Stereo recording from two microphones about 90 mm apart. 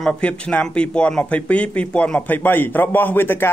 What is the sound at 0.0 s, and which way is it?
A man's voice, 15° left (ahead or behind).